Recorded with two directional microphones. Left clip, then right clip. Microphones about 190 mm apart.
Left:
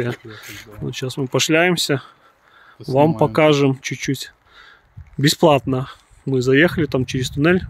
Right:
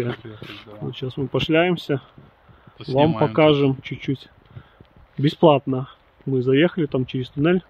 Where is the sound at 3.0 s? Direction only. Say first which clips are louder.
Left 3 dB; 40° left (ahead or behind).